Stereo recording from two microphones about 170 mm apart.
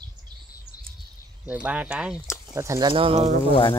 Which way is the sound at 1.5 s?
10° right (ahead or behind).